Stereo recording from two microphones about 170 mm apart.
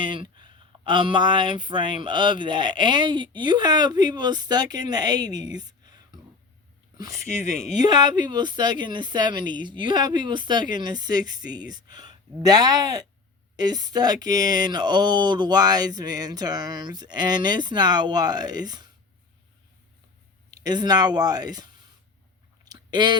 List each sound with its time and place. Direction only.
0.0 s speech: 30° right (ahead or behind)
20.5 s speech: 20° right (ahead or behind)
22.6 s a sound: 25° right (ahead or behind)